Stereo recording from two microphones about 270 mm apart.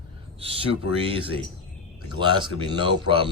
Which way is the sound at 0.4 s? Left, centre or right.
Right.